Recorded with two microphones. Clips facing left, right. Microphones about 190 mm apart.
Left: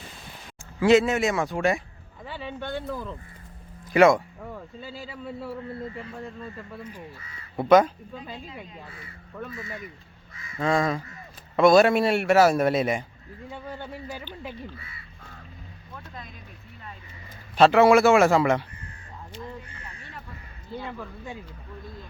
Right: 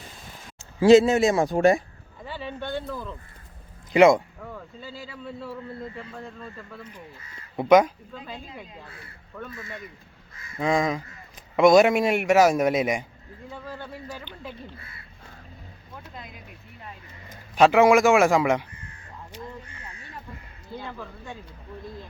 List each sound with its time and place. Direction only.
0.8 s a man's voice: 30° right (ahead or behind)
2.2 s speech: centre (ahead or behind)
3.9 s a man's voice: 20° right (ahead or behind)
4.5 s speech: 10° left (ahead or behind)
6.7 s speech: 10° left (ahead or behind)
7.5 s speech: 15° right (ahead or behind)
9.4 s speech: centre (ahead or behind)
10.6 s a man's voice: 15° right (ahead or behind)
13.5 s speech: 15° left (ahead or behind)
17.6 s a man's voice: 10° right (ahead or behind)